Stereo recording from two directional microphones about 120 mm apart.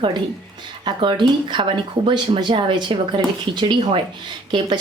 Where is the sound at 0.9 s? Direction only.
40° right (ahead or behind).